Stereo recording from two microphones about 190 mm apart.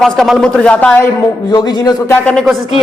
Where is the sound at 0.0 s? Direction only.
Centre (ahead or behind).